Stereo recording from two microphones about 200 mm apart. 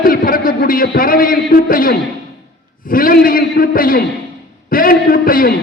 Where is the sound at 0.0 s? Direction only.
45° left (ahead or behind).